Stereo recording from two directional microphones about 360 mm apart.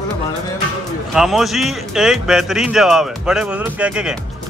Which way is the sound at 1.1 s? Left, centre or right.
Centre.